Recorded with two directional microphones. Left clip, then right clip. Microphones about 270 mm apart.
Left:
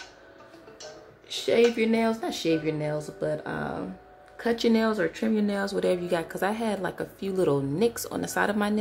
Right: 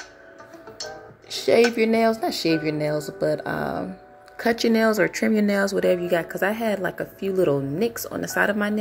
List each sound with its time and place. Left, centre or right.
1.3 s a woman's voice: centre